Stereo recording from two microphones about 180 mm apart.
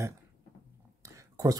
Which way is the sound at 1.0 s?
15° right (ahead or behind).